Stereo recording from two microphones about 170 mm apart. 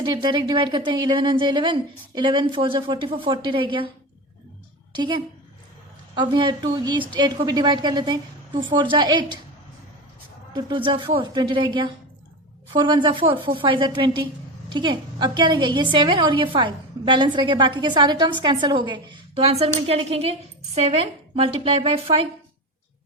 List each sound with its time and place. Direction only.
0.0 s a woman's voice: 25° right (ahead or behind)
6.1 s a woman's voice: 25° right (ahead or behind)
10.5 s a woman's voice: 30° right (ahead or behind)